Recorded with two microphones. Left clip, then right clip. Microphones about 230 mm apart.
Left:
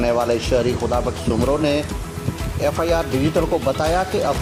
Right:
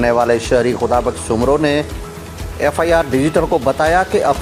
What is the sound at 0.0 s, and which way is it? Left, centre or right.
Speech, right.